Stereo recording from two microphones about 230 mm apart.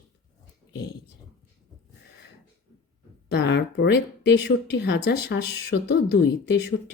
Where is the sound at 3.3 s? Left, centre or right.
Left.